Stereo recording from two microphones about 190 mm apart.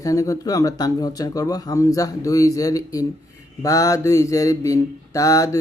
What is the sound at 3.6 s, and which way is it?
Mantra, 15° left (ahead or behind).